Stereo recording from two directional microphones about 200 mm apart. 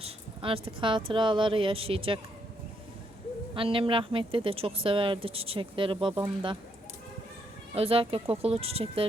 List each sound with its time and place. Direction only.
0.0 s speech: 30° right (ahead or behind)
3.5 s speech: 25° right (ahead or behind)
7.8 s speech: 30° right (ahead or behind)